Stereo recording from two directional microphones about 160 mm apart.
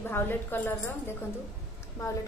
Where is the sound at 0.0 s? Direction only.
15° left (ahead or behind).